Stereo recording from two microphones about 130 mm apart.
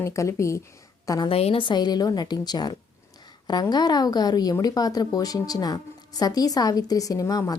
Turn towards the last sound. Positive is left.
turn(degrees=25)  # may be behind; listen again after turning